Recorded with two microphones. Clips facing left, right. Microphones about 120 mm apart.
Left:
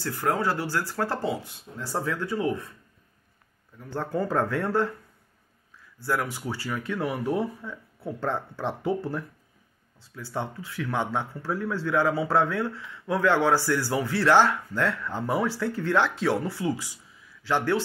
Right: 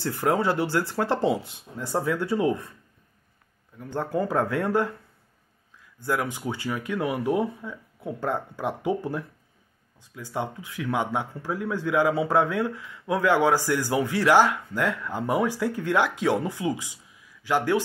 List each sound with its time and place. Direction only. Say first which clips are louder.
0.0 s speech: right 3 dB; 20° right (ahead or behind)
3.7 s speech: right 2 dB; 15° right (ahead or behind)
5.9 s speech: right 1 dB; 20° right (ahead or behind)